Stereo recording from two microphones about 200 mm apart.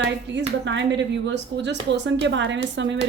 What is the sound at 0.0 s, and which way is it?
Speech, 65° right (ahead or behind).